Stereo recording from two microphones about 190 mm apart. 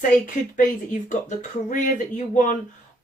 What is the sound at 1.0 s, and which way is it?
Speech, 40° left (ahead or behind).